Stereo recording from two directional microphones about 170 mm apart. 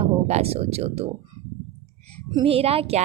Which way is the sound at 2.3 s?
30° right (ahead or behind).